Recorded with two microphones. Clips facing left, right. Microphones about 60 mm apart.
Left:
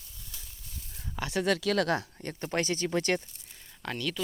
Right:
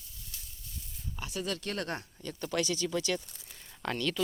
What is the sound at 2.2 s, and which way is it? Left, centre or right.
Speech, left.